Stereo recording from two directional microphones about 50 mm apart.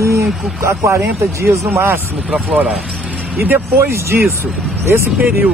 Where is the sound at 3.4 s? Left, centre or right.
Right.